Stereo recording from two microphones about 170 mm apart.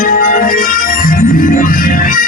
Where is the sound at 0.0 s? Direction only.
55° left (ahead or behind).